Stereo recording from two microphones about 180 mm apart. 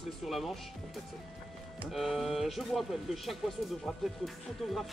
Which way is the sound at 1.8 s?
Centre (ahead or behind).